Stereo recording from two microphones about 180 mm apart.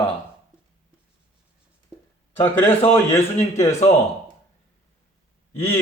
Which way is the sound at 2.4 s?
10° left (ahead or behind).